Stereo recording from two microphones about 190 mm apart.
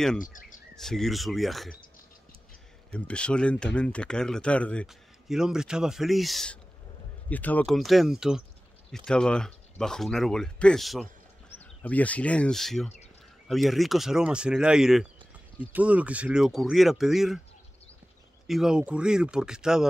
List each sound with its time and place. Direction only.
0.2 s speech: 45° left (ahead or behind)
0.7 s speech: centre (ahead or behind)
2.9 s speech: 5° left (ahead or behind)
18.5 s speech: 5° right (ahead or behind)